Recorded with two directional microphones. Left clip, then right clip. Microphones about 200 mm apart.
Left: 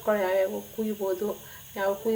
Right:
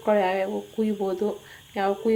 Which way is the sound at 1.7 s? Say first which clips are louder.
Right 2 dB; 30° right (ahead or behind).